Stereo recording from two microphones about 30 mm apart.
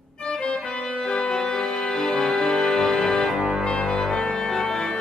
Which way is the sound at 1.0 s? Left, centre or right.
Left.